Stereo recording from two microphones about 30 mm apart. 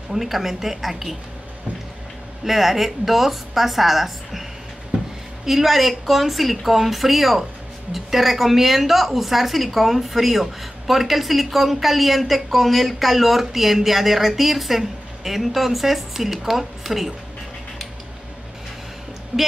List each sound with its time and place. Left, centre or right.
0.1 s a woman's voice: centre
2.4 s a woman's voice: centre
19.3 s a woman's voice: right